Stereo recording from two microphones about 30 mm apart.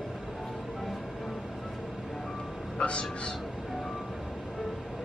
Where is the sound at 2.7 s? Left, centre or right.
Left.